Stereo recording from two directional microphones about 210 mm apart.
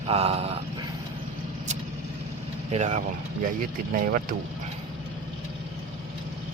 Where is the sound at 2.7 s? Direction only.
35° right (ahead or behind).